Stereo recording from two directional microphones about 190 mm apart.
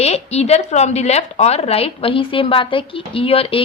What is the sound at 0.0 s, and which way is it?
A woman's voice, 35° left (ahead or behind).